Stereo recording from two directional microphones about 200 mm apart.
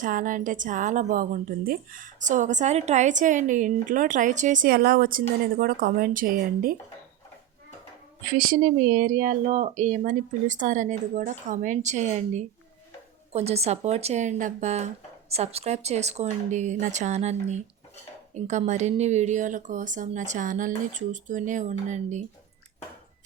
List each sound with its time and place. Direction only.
0.0 s a woman's voice: 40° right (ahead or behind)
8.4 s a woman's voice: 45° right (ahead or behind)